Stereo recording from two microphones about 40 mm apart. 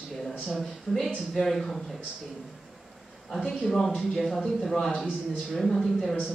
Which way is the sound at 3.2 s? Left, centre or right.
Centre.